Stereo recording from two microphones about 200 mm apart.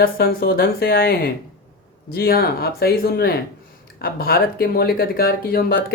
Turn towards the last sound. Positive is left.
turn(degrees=50)  # may be behind; listen again after turning